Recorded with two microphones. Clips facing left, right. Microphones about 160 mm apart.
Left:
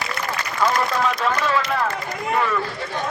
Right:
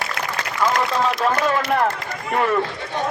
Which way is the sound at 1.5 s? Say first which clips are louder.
Right 2 dB; 55° right (ahead or behind).